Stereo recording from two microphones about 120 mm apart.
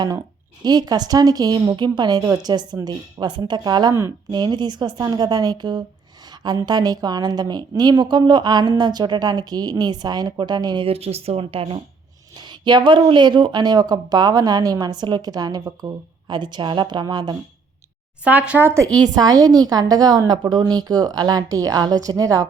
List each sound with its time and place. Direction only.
0.0 s speech: 35° right (ahead or behind)
10.8 s speech: 55° right (ahead or behind)
12.4 s speech: 40° right (ahead or behind)
18.3 s speech: 15° right (ahead or behind)
18.9 s speech: 35° right (ahead or behind)